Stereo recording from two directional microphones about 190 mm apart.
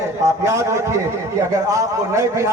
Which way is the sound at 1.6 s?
15° right (ahead or behind).